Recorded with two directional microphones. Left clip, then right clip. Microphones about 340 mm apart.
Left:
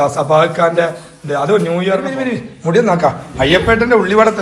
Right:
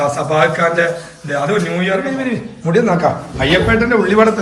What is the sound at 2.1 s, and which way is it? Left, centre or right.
A man's voice, centre.